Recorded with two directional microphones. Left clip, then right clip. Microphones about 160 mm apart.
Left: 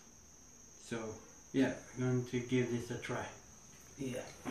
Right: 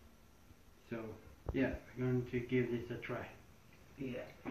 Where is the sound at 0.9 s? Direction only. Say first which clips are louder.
Left 3 dB; 20° left (ahead or behind).